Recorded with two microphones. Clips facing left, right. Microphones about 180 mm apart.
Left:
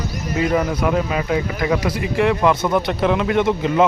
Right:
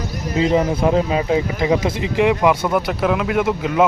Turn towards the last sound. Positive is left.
turn(degrees=-5)  # may be behind; listen again after turning